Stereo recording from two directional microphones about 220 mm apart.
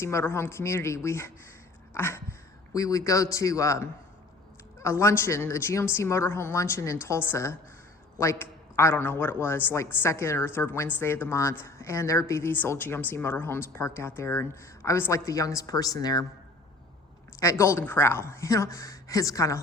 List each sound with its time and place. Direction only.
0.0 s a man's voice: 10° left (ahead or behind)
1.9 s a sound: 10° left (ahead or behind)
2.7 s a man's voice: 15° left (ahead or behind)
17.4 s a man's voice: 10° left (ahead or behind)